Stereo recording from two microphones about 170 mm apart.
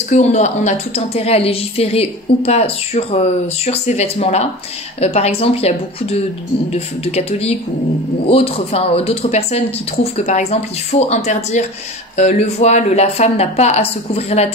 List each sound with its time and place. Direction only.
0.1 s a woman's voice: 40° left (ahead or behind)